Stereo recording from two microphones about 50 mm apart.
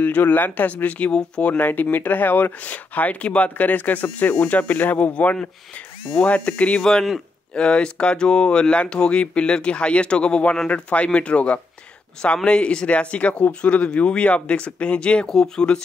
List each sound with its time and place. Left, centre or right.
0.0 s speech: left
6.8 s speech: centre